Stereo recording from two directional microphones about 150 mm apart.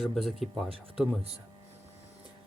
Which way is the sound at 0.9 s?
5° right (ahead or behind).